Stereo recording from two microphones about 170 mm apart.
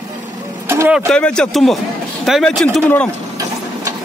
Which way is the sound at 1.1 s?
5° left (ahead or behind).